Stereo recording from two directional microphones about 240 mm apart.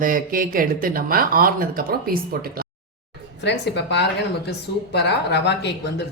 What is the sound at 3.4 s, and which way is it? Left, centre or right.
Speech, left.